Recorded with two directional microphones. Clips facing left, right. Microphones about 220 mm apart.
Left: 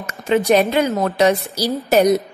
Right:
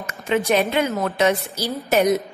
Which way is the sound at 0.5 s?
35° left (ahead or behind).